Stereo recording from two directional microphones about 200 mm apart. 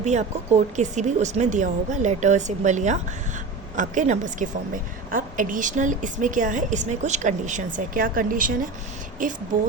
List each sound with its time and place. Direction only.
0.0 s a woman's voice: 35° right (ahead or behind)